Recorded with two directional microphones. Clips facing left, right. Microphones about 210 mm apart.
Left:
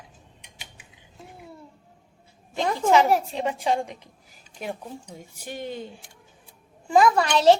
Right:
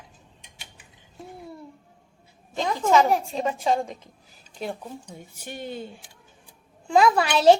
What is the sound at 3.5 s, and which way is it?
Speech, 15° left (ahead or behind).